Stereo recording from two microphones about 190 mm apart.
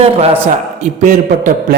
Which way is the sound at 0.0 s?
30° right (ahead or behind).